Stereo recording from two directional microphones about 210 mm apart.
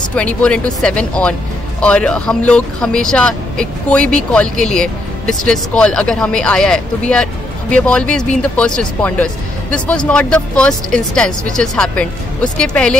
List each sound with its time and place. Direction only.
0.1 s speech: 5° left (ahead or behind)